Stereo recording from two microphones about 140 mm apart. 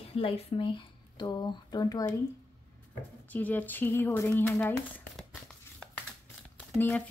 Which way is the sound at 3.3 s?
10° left (ahead or behind).